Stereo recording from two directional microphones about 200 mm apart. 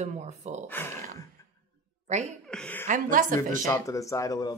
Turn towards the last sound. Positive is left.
turn(degrees=15)  # may be behind; listen again after turning